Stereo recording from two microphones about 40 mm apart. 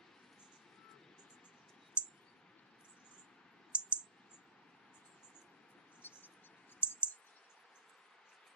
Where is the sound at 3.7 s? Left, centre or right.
Right.